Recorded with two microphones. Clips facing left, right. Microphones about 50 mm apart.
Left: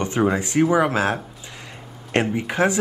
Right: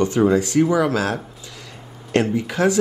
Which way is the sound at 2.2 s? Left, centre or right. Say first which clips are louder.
Right 1 dB; left.